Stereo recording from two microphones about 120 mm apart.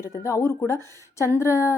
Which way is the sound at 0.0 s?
25° left (ahead or behind).